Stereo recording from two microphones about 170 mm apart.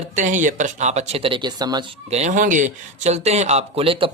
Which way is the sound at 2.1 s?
45° right (ahead or behind).